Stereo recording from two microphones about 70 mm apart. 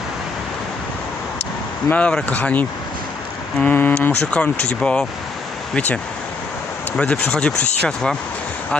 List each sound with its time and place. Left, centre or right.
1.9 s speech: centre
4.3 s speech: centre
6.9 s speech: centre